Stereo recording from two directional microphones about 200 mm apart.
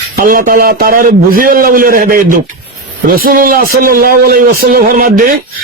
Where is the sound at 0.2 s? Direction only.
45° right (ahead or behind).